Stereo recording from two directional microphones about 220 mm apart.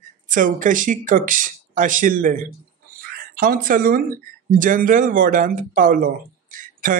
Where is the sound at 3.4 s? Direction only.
40° right (ahead or behind).